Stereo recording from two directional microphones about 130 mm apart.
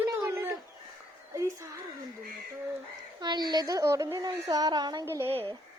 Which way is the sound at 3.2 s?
35° right (ahead or behind).